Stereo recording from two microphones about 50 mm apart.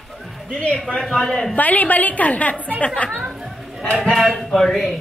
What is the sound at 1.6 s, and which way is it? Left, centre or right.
A woman's voice, left.